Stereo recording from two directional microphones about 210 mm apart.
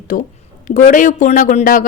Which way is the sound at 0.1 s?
35° left (ahead or behind).